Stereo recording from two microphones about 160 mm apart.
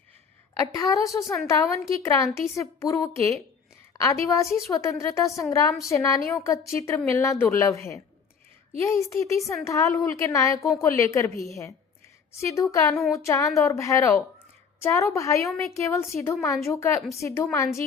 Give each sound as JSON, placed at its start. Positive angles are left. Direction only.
{"t": 0.8, "sound": "a woman's voice", "side_deg": 20}